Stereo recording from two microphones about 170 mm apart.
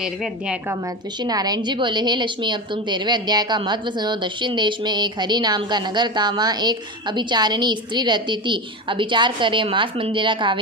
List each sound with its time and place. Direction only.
0.0 s a woman's voice: 5° right (ahead or behind)
1.2 s a woman's voice: 25° right (ahead or behind)